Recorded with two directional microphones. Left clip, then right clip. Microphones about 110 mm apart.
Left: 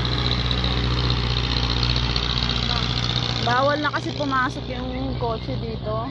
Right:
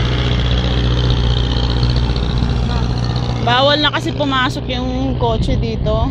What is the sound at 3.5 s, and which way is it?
Speech, 15° right (ahead or behind).